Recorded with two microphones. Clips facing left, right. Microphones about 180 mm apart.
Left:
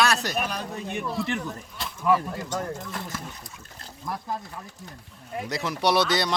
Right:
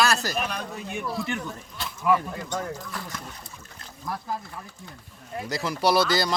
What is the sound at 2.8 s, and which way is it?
Speech, 25° left (ahead or behind).